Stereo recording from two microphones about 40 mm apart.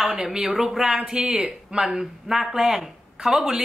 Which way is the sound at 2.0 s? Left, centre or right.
Centre.